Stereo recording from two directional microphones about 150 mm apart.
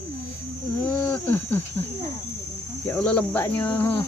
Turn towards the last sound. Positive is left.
turn(degrees=10)  # may be behind; listen again after turning